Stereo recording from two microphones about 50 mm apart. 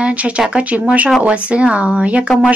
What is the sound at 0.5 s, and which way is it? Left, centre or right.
Speech, right.